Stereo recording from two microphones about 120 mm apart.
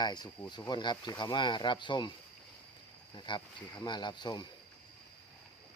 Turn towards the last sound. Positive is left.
turn(degrees=40)  # may be behind; listen again after turning